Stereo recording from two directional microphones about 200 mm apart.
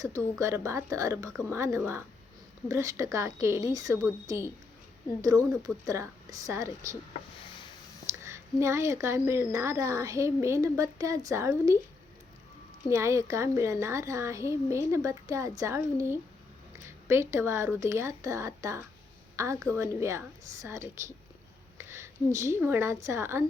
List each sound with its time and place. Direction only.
0.0 s a woman's voice: 15° right (ahead or behind)
8.2 s a woman's voice: 15° right (ahead or behind)
12.9 s a woman's voice: 15° right (ahead or behind)